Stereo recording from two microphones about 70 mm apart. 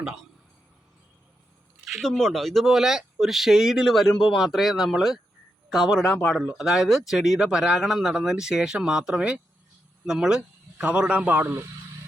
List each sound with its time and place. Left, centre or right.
2.0 s speech: centre
6.5 s speech: centre; by 11.6 s right